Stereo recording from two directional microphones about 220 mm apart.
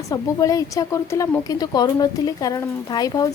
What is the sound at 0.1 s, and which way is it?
Speech, 15° left (ahead or behind).